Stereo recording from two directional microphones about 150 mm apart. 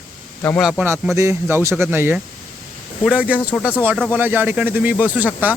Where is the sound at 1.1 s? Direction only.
20° right (ahead or behind).